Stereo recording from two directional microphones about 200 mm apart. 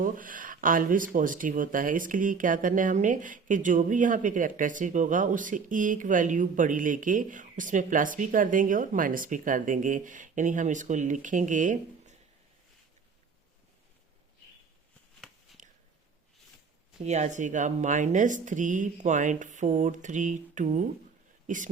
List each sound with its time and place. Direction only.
0.0 s speech: 45° right (ahead or behind)
15.6 s a sound: 40° right (ahead or behind)
17.0 s speech: 35° right (ahead or behind)